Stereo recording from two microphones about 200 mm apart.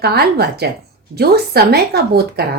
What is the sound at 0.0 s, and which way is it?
A woman's voice, 50° right (ahead or behind).